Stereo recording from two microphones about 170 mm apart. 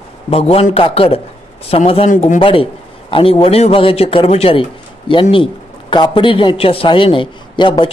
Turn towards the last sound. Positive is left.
turn(degrees=30)  # may be behind; listen again after turning